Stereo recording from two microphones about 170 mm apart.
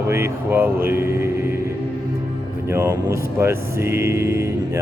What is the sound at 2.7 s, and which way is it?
Speech, 15° right (ahead or behind).